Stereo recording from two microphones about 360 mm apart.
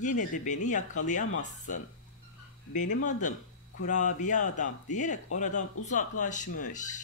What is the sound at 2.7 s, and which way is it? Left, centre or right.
Speech, left.